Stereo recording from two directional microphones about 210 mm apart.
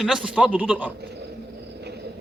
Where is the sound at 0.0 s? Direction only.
5° right (ahead or behind).